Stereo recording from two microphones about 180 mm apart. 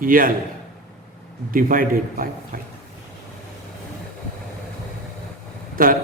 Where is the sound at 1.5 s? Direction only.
50° right (ahead or behind).